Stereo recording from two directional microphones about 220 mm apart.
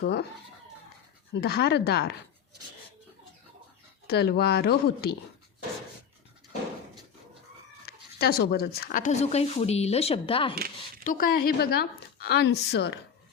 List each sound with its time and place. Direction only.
0.0 s a woman's voice: 50° left (ahead or behind)
1.3 s a woman's voice: 45° left (ahead or behind)
4.0 s a woman's voice: 45° left (ahead or behind)
7.9 s speech: 45° left (ahead or behind); by 10.6 s 25° left (ahead or behind)
11.0 s a woman's voice: 40° left (ahead or behind)